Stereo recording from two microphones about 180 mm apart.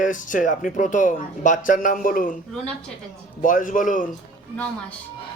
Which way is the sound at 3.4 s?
45° left (ahead or behind).